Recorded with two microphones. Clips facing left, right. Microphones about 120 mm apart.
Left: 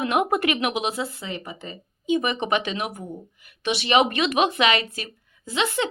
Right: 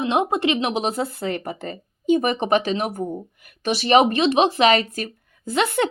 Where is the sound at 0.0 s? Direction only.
25° right (ahead or behind).